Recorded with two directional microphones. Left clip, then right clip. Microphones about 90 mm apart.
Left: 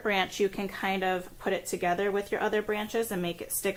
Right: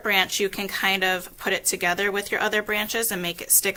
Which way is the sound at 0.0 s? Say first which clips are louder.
Right 5 dB; 35° right (ahead or behind).